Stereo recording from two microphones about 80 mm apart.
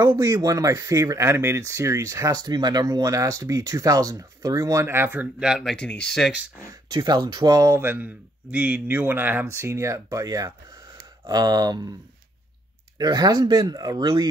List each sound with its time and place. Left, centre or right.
0.0 s speech: right
2.4 s speech: right
4.8 s a man's voice: right
5.6 s speech: centre
7.0 s speech: right
7.7 s a man's voice: right
9.5 s speech: right
11.2 s speech: right
12.9 s speech: right